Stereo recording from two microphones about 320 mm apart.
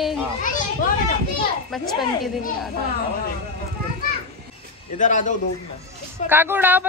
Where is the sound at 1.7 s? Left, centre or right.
Centre.